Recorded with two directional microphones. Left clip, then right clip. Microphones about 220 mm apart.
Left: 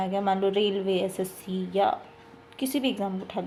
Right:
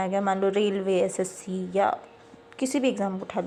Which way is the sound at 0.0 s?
25° right (ahead or behind).